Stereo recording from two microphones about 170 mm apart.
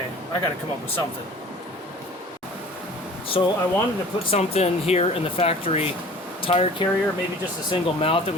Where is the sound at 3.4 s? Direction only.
30° left (ahead or behind).